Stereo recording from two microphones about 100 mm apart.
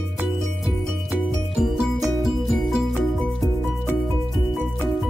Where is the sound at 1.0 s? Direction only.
Centre (ahead or behind).